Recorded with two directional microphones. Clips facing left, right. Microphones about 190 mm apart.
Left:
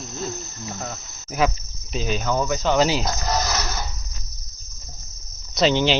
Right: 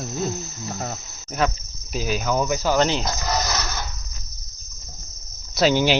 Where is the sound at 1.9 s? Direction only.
5° right (ahead or behind).